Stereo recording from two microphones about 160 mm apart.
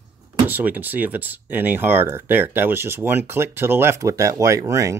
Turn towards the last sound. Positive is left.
turn(degrees=-20)  # may be behind; listen again after turning